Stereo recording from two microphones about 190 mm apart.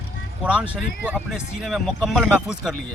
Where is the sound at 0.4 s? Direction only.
5° right (ahead or behind).